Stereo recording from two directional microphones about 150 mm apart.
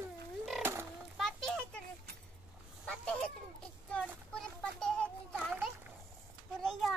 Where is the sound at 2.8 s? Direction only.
5° left (ahead or behind).